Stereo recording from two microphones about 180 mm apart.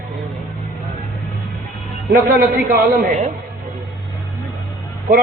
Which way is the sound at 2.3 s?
55° right (ahead or behind).